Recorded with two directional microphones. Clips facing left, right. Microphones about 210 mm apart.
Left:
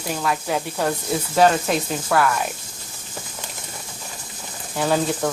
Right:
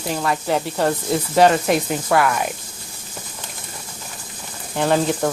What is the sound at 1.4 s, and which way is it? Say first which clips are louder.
Speech: right 2 dB; 5° right (ahead or behind).